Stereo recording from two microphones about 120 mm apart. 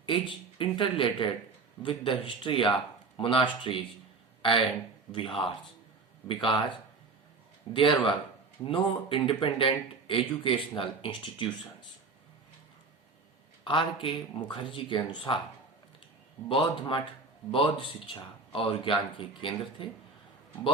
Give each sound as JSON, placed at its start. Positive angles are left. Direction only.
{"t": 0.0, "sound": "speech", "side_deg": 45}
{"t": 6.2, "sound": "speech", "side_deg": 45}
{"t": 13.7, "sound": "speech", "side_deg": 45}
{"t": 16.5, "sound": "speech", "side_deg": 45}